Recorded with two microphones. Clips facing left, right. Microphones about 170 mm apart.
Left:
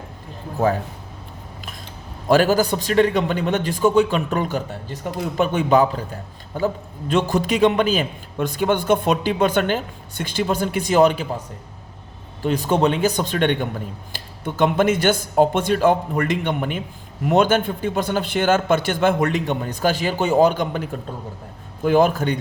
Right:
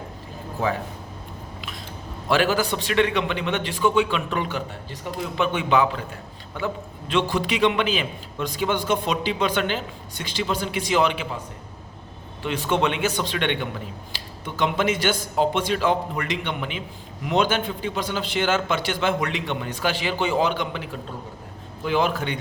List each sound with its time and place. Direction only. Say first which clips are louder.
2.3 s a man's voice: left 5 dB; 40° left (ahead or behind)
12.4 s a man's voice: left 4 dB; 40° left (ahead or behind)